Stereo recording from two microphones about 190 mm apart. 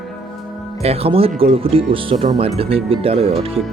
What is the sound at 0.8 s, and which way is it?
Speech, 30° right (ahead or behind).